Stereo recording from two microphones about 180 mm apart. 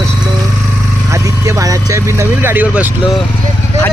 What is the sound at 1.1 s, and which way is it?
Speech, 15° right (ahead or behind).